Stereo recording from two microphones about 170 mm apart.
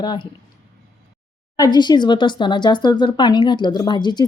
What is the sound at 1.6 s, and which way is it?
Speech, 25° left (ahead or behind).